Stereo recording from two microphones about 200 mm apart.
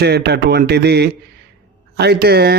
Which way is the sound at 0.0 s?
55° right (ahead or behind).